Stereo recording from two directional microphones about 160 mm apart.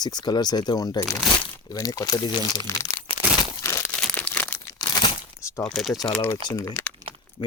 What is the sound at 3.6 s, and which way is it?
Crumpling, 20° left (ahead or behind).